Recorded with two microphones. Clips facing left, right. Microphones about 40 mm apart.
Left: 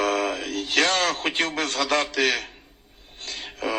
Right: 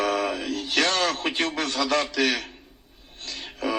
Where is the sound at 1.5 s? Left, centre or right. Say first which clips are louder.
Left 1 dB; left.